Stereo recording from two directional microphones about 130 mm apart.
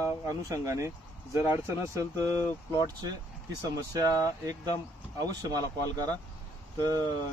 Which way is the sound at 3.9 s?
25° right (ahead or behind).